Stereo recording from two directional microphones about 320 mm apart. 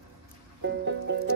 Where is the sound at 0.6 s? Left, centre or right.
Right.